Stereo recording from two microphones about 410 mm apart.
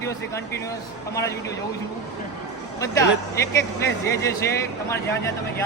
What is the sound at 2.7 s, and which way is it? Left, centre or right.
A man's voice, centre.